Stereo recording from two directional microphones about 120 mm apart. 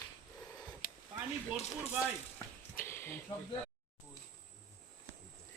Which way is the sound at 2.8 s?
20° left (ahead or behind).